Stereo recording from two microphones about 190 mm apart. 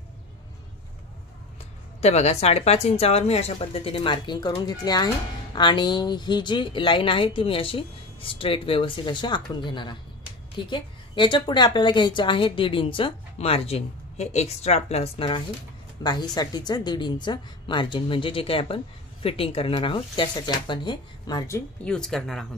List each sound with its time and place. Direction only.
2.0 s speech: 35° left (ahead or behind); by 21.9 s 15° left (ahead or behind)
21.9 s speech: 5° left (ahead or behind)